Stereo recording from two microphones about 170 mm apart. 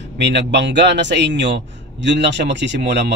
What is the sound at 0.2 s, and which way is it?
A man's voice, 90° right.